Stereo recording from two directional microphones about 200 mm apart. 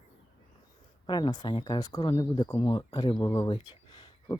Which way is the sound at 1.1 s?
20° left (ahead or behind).